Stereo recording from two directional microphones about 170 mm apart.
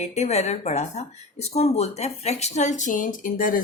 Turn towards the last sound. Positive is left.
turn(degrees=55)  # may be behind; listen again after turning